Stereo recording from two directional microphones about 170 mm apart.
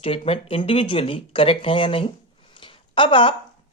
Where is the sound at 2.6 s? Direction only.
30° left (ahead or behind).